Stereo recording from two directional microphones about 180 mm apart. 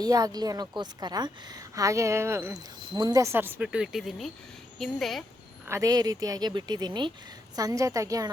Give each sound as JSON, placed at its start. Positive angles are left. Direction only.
{"t": 0.0, "sound": "speech", "side_deg": -20}
{"t": 5.6, "sound": "speech", "side_deg": -15}